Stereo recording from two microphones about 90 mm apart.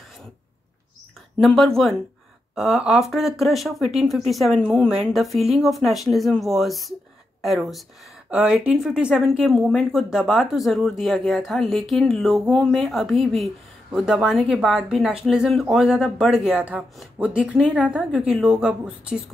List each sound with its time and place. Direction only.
1.4 s speech: 5° left (ahead or behind)
8.3 s a woman's voice: 15° right (ahead or behind)